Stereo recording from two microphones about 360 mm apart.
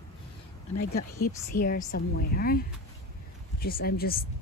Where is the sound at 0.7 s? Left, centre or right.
Left.